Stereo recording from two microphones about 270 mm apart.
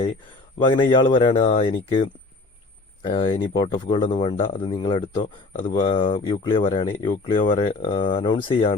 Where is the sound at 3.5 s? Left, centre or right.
Left.